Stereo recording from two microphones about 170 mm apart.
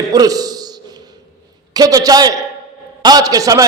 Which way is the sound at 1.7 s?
20° right (ahead or behind).